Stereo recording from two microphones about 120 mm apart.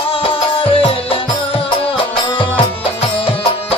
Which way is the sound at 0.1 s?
50° left (ahead or behind).